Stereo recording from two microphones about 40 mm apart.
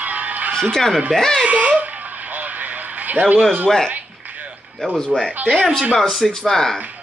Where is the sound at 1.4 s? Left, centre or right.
Right.